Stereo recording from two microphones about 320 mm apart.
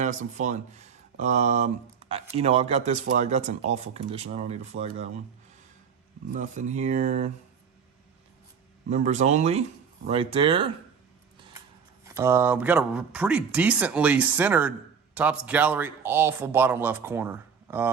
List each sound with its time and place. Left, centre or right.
0.0 s speech: right
6.3 s speech: right
8.9 s speech: right
12.0 s speech: centre